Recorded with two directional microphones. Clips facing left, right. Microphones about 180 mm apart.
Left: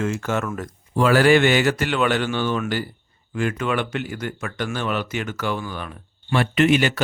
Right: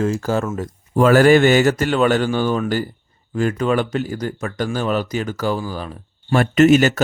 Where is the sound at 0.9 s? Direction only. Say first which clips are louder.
Right 4 dB; 45° right (ahead or behind).